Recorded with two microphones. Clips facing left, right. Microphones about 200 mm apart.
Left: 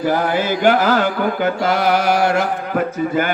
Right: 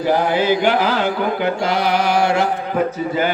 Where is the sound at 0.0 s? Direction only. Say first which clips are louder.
Right 1 dB; 50° left (ahead or behind).